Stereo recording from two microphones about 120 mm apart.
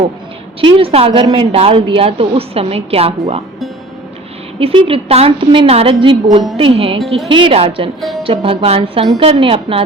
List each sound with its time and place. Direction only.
0.6 s a woman's voice: 50° right (ahead or behind)
1.2 s a woman's voice: 40° right (ahead or behind)
1.5 s a woman's voice: 50° right (ahead or behind)
4.6 s a woman's voice: 50° right (ahead or behind)